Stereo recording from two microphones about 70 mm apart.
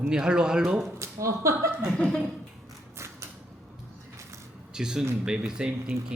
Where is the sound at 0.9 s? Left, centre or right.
Right.